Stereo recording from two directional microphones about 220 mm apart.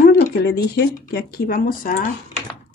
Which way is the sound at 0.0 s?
40° left (ahead or behind).